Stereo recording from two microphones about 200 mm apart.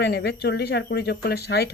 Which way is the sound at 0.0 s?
55° left (ahead or behind).